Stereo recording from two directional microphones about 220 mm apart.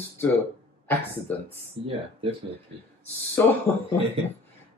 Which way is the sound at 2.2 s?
25° right (ahead or behind).